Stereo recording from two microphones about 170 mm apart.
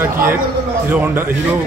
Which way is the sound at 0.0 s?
15° right (ahead or behind).